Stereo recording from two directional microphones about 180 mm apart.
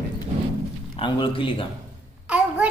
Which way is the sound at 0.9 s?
25° left (ahead or behind).